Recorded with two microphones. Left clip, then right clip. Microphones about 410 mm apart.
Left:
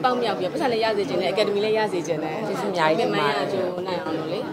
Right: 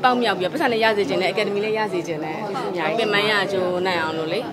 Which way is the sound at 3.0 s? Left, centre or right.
Right.